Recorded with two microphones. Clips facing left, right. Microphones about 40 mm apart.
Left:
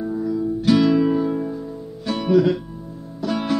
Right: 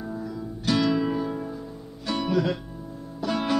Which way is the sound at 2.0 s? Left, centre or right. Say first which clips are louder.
Left 7 dB; centre.